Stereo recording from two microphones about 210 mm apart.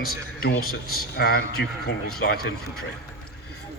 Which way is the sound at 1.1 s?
50° left (ahead or behind).